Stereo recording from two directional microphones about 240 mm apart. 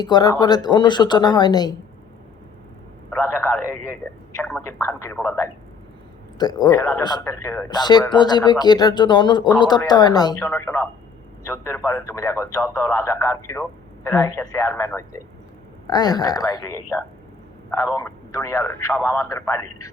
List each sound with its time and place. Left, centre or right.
0.0 s speech: centre
3.2 s a sound: centre
4.4 s speech: centre